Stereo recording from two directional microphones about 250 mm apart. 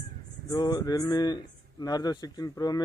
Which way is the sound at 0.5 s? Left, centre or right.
Centre.